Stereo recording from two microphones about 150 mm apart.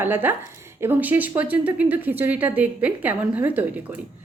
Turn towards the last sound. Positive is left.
turn(degrees=-10)  # may be behind; listen again after turning